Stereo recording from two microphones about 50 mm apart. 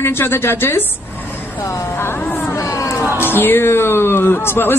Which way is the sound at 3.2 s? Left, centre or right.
Left.